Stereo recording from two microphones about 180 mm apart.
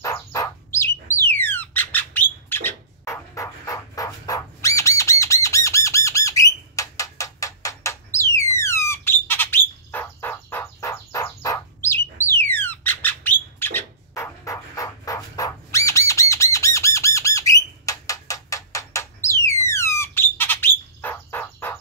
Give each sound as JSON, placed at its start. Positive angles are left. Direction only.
{"t": 0.0, "sound": "bird", "side_deg": 20}
{"t": 16.5, "sound": "squawk", "side_deg": 15}